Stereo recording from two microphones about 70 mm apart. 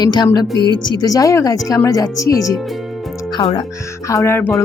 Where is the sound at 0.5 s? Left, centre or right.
Right.